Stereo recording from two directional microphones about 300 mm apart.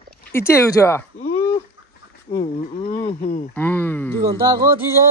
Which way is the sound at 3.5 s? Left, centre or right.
Centre.